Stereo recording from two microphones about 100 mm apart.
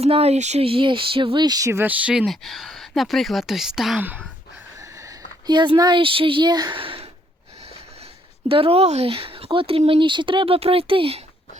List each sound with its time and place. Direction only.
0.0 s speech: 90° right; by 1.8 s 35° right (ahead or behind)
1.8 s speech: 15° right (ahead or behind)
2.2 s speech: centre (ahead or behind)
4.8 s a sound: 30° right (ahead or behind)
5.5 s speech: 50° right (ahead or behind)
6.0 s speech: 60° right (ahead or behind)
8.4 s speech: 70° right (ahead or behind)